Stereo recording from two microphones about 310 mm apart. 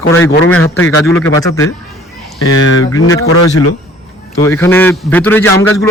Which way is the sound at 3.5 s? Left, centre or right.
Left.